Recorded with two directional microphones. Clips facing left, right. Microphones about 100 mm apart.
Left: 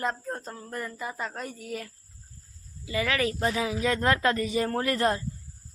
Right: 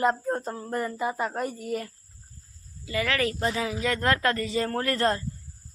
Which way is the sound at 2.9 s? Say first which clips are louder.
Right 1 dB; 15° left (ahead or behind).